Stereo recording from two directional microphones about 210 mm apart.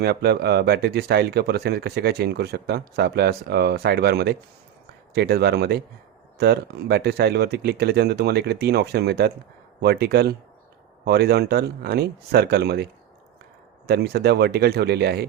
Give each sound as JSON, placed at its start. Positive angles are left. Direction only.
{"t": 0.0, "sound": "speech", "side_deg": -50}